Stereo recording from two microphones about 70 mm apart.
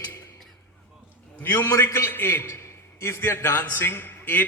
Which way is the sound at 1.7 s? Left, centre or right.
Left.